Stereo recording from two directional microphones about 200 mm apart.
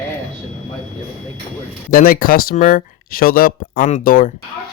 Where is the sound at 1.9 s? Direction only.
45° left (ahead or behind).